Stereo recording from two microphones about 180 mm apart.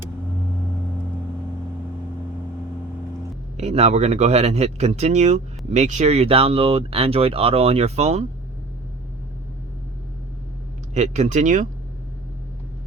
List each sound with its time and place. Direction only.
3.6 s speech: 35° right (ahead or behind)
10.9 s speech: 40° right (ahead or behind)